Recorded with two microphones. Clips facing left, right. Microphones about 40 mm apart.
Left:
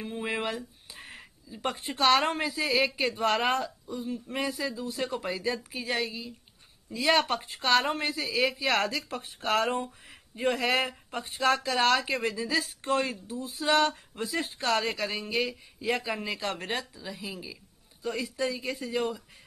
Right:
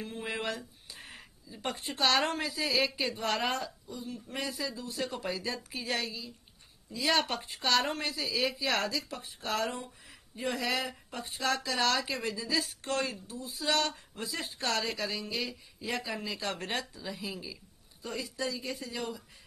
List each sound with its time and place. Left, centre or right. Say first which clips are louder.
0.0 s speech: left 4 dB; centre
1.0 s speech: left 3 dB; centre
3.3 s a woman's voice: left 5 dB; left
5.1 s speech: left 4 dB; centre
6.0 s a woman's voice: left 3 dB; left
14.4 s speech: left 4 dB; centre
14.9 s a woman's voice: left 3 dB; left
16.6 s speech: left 2 dB; centre
18.3 s speech: left 3 dB; left
18.6 s speech: left 4 dB; centre
18.9 s speech: left 11 dB; left